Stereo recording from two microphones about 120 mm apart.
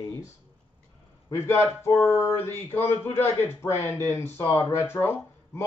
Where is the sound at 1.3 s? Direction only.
20° left (ahead or behind).